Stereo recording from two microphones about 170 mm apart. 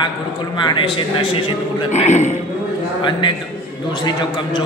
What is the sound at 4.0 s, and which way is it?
Speech, 25° left (ahead or behind).